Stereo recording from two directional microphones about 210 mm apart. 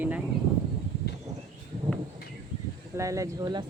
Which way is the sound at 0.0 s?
5° right (ahead or behind).